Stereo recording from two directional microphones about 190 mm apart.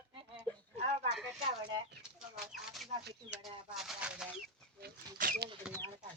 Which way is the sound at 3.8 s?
5° right (ahead or behind).